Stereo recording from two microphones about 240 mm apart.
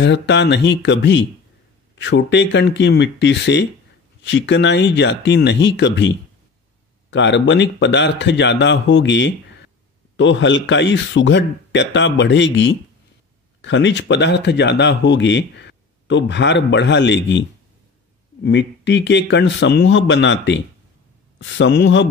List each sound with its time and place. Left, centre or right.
0.0 s speech: left